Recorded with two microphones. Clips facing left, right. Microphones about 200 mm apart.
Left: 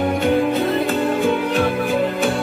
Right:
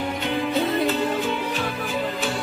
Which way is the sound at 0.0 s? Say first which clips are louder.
Left 8 dB; 50° left (ahead or behind).